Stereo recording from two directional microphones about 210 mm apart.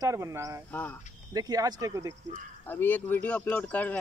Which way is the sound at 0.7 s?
10° left (ahead or behind).